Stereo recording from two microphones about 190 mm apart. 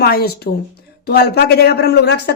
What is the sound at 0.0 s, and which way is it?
A woman's voice, 55° left (ahead or behind).